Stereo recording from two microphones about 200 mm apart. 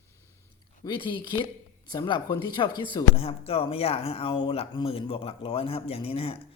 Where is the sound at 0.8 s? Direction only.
25° left (ahead or behind).